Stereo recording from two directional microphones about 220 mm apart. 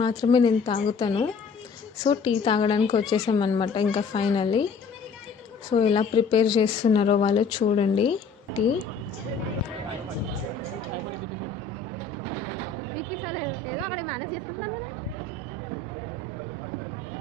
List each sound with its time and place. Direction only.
0.0 s speech: 20° left (ahead or behind)
5.7 s speech: 25° left (ahead or behind)
13.2 s a sound: centre (ahead or behind)